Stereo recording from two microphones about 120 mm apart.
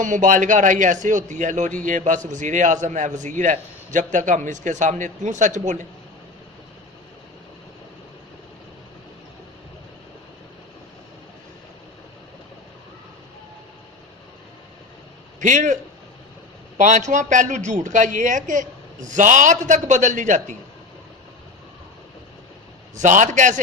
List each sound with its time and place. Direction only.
0.0 s a man's voice: 90° right
15.4 s a man's voice: 90° right
23.0 s a man's voice: 90° right